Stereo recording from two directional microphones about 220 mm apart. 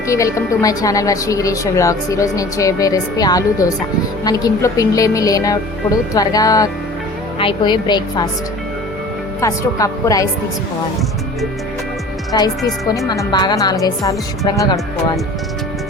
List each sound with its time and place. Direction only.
0.1 s a woman's voice: 15° left (ahead or behind)
9.4 s a woman's voice: 15° left (ahead or behind)
12.3 s a woman's voice: 20° left (ahead or behind)